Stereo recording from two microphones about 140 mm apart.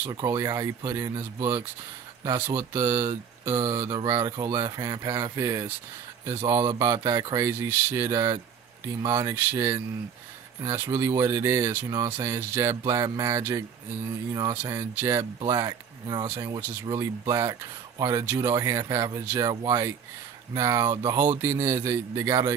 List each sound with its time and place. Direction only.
0.0 s speech: 20° right (ahead or behind)